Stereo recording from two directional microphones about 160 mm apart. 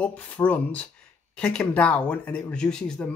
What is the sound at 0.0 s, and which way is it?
Speech, 10° left (ahead or behind).